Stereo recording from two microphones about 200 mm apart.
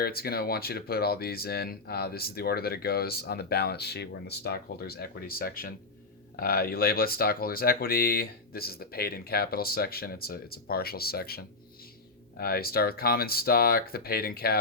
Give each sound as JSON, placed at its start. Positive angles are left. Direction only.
{"t": 0.0, "sound": "speech", "side_deg": 50}